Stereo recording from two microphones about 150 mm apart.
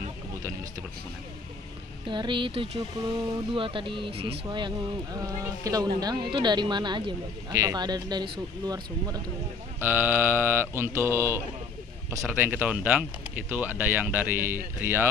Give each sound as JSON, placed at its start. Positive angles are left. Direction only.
{"t": 2.0, "sound": "speech", "side_deg": -30}
{"t": 9.8, "sound": "speech", "side_deg": -15}